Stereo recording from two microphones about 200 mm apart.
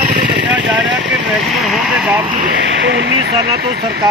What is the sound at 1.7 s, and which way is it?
Speech, centre (ahead or behind).